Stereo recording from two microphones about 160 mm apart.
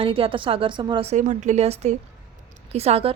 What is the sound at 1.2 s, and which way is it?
Speech, 50° right (ahead or behind).